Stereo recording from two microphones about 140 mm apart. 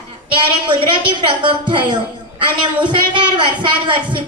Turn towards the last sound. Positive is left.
turn(degrees=-35)  # may be behind; listen again after turning